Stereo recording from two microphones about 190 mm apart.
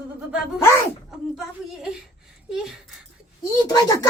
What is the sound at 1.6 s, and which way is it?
Speech, 5° right (ahead or behind).